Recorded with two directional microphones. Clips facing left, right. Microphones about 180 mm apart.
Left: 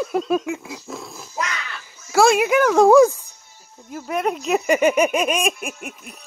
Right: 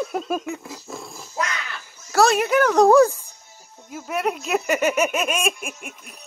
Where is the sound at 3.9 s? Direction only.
5° right (ahead or behind).